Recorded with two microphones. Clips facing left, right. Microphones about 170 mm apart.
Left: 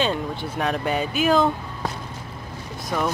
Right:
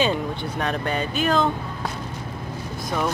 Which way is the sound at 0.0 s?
Centre (ahead or behind).